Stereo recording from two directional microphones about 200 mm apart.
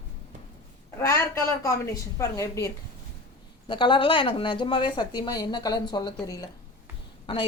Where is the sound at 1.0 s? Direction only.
15° left (ahead or behind).